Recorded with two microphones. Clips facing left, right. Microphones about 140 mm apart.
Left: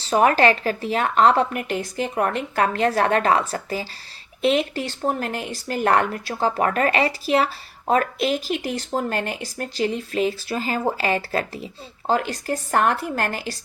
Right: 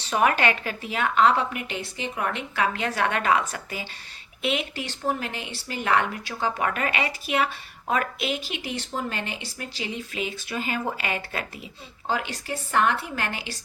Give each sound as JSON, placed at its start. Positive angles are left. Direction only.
{"t": 0.0, "sound": "a woman's voice", "side_deg": 35}